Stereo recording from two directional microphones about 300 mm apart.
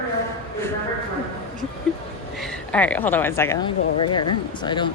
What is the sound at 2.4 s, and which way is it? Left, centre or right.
Speech, centre.